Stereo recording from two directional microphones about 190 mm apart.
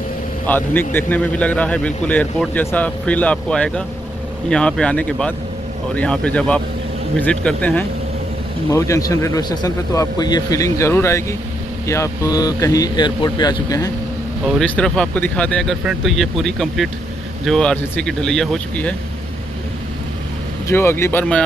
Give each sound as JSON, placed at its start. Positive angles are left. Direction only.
{"t": 0.5, "sound": "speech", "side_deg": 10}
{"t": 14.6, "sound": "speech", "side_deg": 5}
{"t": 20.6, "sound": "speech", "side_deg": 10}